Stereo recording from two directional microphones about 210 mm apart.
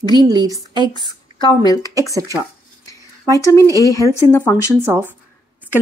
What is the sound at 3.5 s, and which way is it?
Speech, 15° left (ahead or behind).